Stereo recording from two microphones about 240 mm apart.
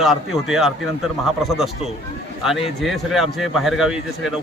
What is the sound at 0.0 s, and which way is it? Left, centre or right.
A man's voice, centre.